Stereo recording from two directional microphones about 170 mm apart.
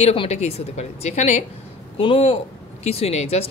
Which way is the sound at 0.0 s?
35° left (ahead or behind).